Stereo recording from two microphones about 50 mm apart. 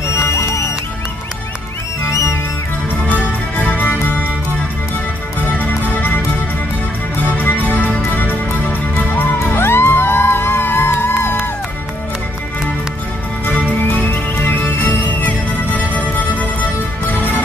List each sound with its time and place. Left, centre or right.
0.0 s music: left
2.0 s music: left
3.1 s music: left
5.6 s music: left
7.3 s music: left
13.5 s music: left